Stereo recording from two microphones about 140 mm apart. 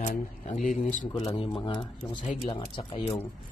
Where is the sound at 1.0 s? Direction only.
40° left (ahead or behind).